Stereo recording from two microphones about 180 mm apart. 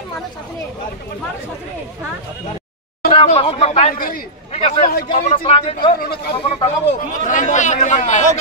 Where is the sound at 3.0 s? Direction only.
35° left (ahead or behind).